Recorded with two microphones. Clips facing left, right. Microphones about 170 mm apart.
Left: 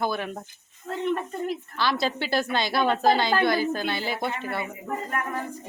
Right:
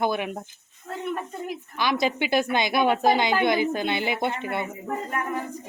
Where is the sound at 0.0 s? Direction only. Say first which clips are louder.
Right 2 dB; 15° right (ahead or behind).